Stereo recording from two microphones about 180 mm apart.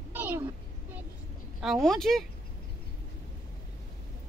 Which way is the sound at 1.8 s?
Centre (ahead or behind).